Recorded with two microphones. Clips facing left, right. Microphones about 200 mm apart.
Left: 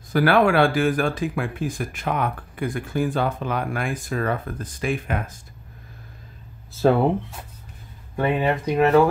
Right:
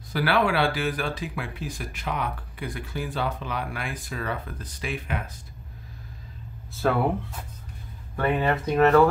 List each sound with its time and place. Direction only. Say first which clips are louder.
0.1 s speech: left 6 dB; 50° left (ahead or behind)
6.8 s speech: left 6 dB; 25° left (ahead or behind)
8.2 s speech: left 2 dB; 15° left (ahead or behind)